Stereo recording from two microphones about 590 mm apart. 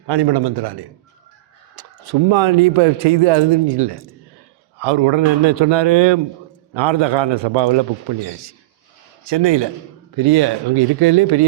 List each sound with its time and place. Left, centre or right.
0.1 s a man's voice: right
9.2 s a man's voice: right